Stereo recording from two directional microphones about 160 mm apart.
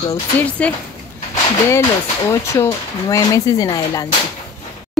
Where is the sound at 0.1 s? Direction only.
10° left (ahead or behind).